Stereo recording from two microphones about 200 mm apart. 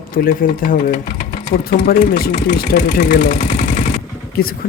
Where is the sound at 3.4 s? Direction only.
40° left (ahead or behind).